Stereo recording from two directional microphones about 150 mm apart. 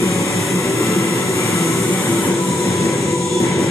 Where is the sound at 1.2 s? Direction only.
20° left (ahead or behind).